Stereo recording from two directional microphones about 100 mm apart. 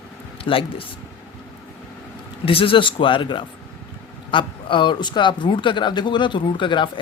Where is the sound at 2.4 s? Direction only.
65° left (ahead or behind).